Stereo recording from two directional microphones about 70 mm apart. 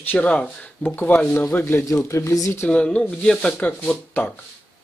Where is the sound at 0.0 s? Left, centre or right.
Left.